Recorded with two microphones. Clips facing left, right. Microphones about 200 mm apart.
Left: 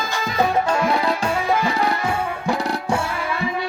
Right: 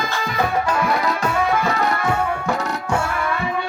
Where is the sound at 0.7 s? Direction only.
30° left (ahead or behind).